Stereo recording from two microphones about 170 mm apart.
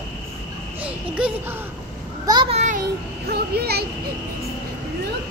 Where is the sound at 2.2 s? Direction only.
25° right (ahead or behind).